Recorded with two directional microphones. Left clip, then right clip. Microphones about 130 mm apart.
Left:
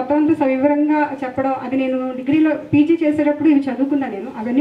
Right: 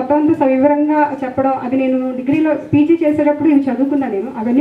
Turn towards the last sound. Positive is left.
turn(degrees=40)  # may be behind; listen again after turning